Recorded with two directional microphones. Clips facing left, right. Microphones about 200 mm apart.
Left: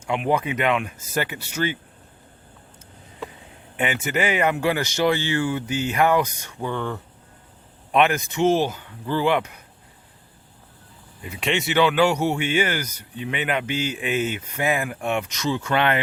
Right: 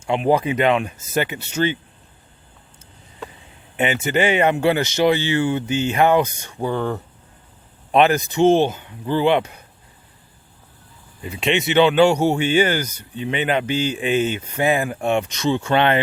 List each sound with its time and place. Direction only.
0.0 s speech: 30° right (ahead or behind)
3.8 s speech: 25° right (ahead or behind)
11.2 s speech: 25° right (ahead or behind)